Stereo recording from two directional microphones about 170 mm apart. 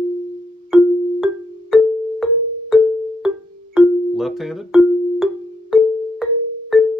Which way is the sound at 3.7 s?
Centre (ahead or behind).